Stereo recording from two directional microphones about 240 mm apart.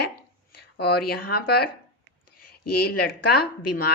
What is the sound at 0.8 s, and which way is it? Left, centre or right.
Speech, left.